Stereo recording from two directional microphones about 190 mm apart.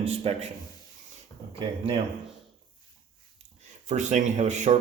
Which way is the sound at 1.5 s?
30° right (ahead or behind).